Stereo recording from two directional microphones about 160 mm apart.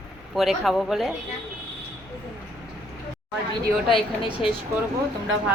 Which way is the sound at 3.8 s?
35° left (ahead or behind).